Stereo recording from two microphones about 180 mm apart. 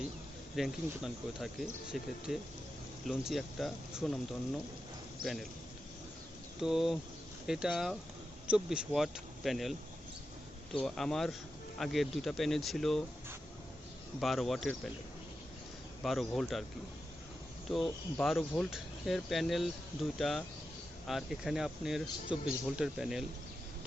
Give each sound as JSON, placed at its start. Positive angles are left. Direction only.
{"t": 0.5, "sound": "speech", "side_deg": 0}
{"t": 5.2, "sound": "speech", "side_deg": 0}
{"t": 6.6, "sound": "speech", "side_deg": 0}
{"t": 10.8, "sound": "speech", "side_deg": 0}
{"t": 14.2, "sound": "speech", "side_deg": 0}
{"t": 16.0, "sound": "speech", "side_deg": 0}
{"t": 17.7, "sound": "speech", "side_deg": 0}